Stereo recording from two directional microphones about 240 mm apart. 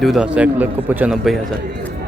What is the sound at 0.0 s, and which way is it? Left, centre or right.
A man's voice, centre.